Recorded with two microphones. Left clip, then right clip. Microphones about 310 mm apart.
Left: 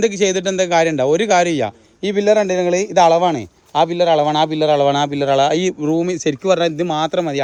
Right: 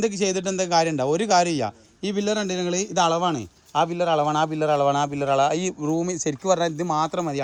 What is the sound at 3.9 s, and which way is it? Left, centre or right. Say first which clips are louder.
Speech: left 8 dB; centre.